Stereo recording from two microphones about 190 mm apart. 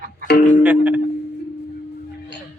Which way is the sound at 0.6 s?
5° right (ahead or behind).